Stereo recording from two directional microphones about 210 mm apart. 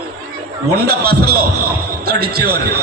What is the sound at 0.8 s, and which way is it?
A man's voice, 45° right (ahead or behind).